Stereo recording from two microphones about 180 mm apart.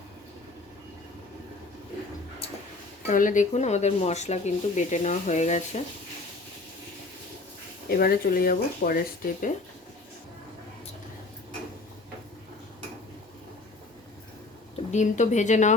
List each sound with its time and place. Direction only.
3.1 s speech: 45° left (ahead or behind)
7.9 s speech: 55° left (ahead or behind)
14.9 s speech: 40° left (ahead or behind)